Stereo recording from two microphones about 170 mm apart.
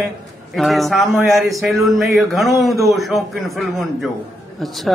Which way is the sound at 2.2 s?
Centre (ahead or behind).